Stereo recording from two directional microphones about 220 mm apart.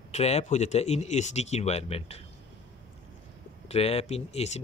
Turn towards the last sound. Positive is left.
turn(degrees=30)  # may be behind; listen again after turning